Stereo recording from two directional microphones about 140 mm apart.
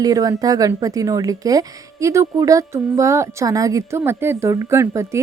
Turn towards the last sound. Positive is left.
turn(degrees=-20)  # may be behind; listen again after turning